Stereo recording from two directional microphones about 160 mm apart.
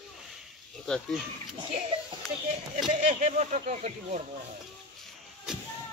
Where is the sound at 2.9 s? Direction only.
50° right (ahead or behind).